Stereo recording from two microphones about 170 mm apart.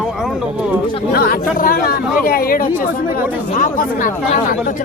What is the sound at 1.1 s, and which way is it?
Speech, 65° left (ahead or behind).